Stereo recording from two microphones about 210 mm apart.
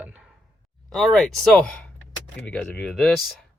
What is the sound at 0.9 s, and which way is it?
Speech, centre (ahead or behind).